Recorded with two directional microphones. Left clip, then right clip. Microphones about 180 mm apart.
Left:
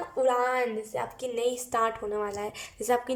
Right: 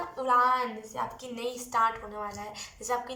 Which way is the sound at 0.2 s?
45° left (ahead or behind).